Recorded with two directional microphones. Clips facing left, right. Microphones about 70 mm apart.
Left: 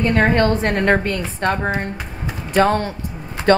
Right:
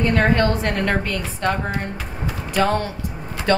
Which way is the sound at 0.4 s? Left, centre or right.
Left.